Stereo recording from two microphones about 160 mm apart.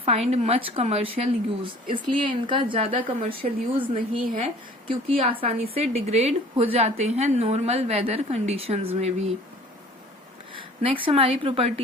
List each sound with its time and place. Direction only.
0.0 s a woman's voice: 40° right (ahead or behind)
3.9 s a woman's voice: 50° right (ahead or behind)
4.9 s a woman's voice: 35° right (ahead or behind)
10.5 s a woman's voice: 35° right (ahead or behind)